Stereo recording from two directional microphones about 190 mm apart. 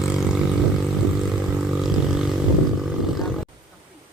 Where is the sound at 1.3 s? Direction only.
Centre (ahead or behind).